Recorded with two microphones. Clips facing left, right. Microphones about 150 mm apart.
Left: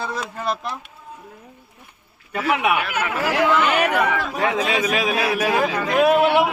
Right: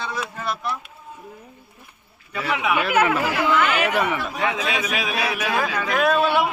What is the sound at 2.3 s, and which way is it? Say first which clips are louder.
Speech: left 3 dB; 50° left (ahead or behind).